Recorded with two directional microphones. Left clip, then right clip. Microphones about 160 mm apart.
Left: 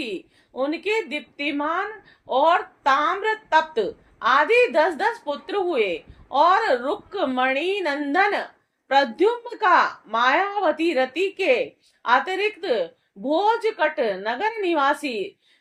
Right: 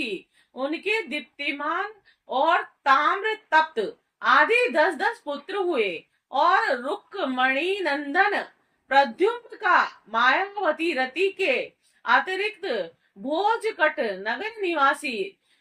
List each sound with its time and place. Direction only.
0.5 s a woman's voice: 40° left (ahead or behind)